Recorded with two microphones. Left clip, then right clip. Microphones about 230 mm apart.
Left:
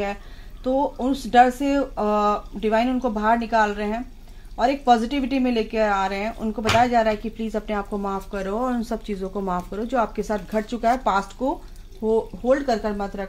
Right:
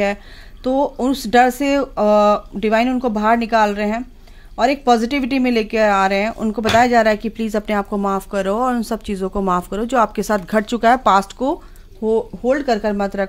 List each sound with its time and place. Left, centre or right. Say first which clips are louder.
0.7 s speech: right 5 dB; right